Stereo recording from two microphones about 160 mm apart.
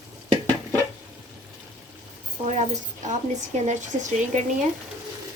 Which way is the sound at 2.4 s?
45° right (ahead or behind).